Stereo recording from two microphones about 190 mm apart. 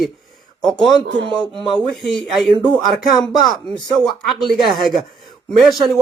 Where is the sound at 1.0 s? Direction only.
70° right (ahead or behind).